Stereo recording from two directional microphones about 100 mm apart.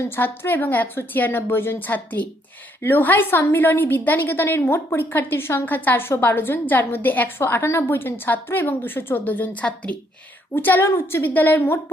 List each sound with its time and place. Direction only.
0.0 s a woman's voice: 20° left (ahead or behind)